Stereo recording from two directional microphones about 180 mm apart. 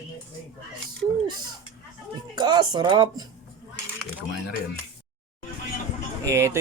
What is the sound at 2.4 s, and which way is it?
Speech, 25° right (ahead or behind).